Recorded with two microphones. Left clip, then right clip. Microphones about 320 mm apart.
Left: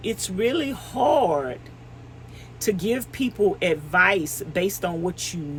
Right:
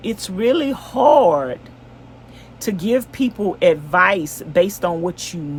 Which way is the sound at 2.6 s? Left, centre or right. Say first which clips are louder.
Right 5 dB; centre.